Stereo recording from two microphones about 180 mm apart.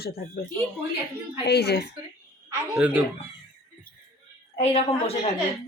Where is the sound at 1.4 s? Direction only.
65° left (ahead or behind).